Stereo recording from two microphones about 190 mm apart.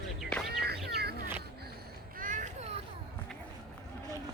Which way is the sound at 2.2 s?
45° right (ahead or behind).